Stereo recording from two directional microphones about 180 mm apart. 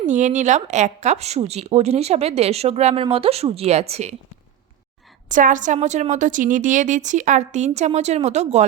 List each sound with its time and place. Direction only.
0.0 s a woman's voice: 45° right (ahead or behind)
5.3 s a woman's voice: 45° right (ahead or behind)